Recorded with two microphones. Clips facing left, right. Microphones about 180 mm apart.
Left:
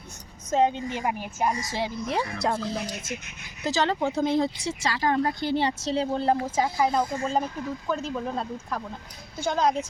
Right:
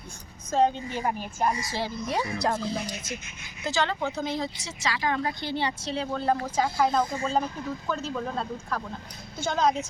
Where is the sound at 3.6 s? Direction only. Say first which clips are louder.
Left 3 dB; 40° left (ahead or behind).